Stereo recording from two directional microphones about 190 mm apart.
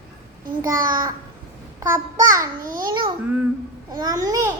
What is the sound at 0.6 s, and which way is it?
Speech, 20° right (ahead or behind).